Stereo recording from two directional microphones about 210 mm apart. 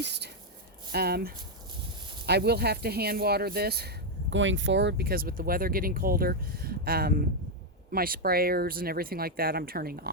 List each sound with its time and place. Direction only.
0.0 s speech: 55° right (ahead or behind)